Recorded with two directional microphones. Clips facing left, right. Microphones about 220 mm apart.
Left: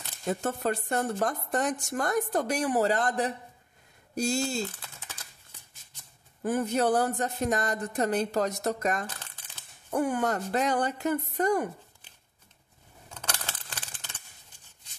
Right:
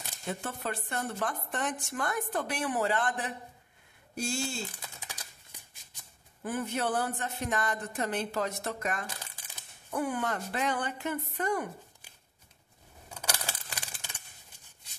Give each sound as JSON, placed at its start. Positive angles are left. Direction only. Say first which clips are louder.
{"t": 0.3, "sound": "speech", "louder": "left 7 dB", "side_deg": 45}
{"t": 4.6, "sound": "typing", "louder": "left 3 dB", "side_deg": -10}
{"t": 6.4, "sound": "speech", "louder": "left 6 dB", "side_deg": 40}
{"t": 9.0, "sound": "crumpling", "louder": "left 3 dB", "side_deg": -10}
{"t": 9.8, "sound": "speech", "louder": "left 5 dB", "side_deg": 45}
{"t": 13.1, "sound": "a sound", "louder": "right 1 dB", "side_deg": -10}